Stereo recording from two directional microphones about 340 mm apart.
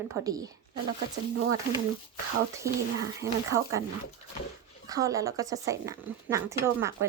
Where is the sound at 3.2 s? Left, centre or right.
Centre.